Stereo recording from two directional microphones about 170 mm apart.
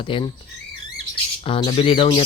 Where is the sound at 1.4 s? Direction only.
30° left (ahead or behind).